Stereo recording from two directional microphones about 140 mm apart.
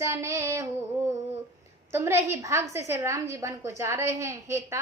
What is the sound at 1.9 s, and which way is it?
A woman's voice, 20° right (ahead or behind).